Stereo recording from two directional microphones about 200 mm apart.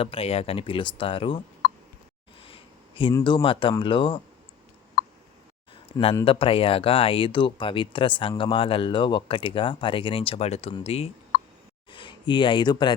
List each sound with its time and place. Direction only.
0.0 s speech: 30° left (ahead or behind)
2.4 s speech: 25° left (ahead or behind)
5.9 s speech: 25° left (ahead or behind)